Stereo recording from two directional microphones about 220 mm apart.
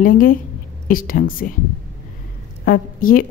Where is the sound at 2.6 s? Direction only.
40° left (ahead or behind).